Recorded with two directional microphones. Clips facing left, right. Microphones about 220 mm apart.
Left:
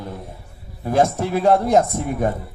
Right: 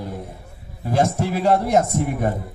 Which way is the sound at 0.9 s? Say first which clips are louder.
Left 2 dB; 50° left (ahead or behind).